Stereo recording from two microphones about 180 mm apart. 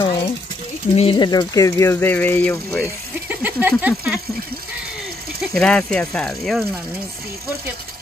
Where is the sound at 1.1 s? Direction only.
25° left (ahead or behind).